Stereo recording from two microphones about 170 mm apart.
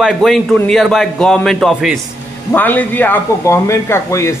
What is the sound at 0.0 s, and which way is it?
A man's voice, centre (ahead or behind).